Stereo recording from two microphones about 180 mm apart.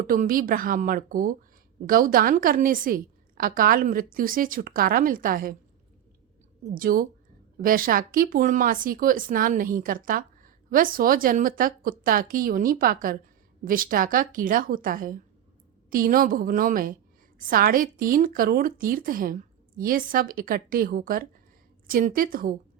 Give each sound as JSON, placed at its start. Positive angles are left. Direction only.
{"t": 0.1, "sound": "speech", "side_deg": -50}
{"t": 6.7, "sound": "speech", "side_deg": -50}